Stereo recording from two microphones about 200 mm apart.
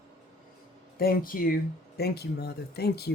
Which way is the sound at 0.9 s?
50° left (ahead or behind).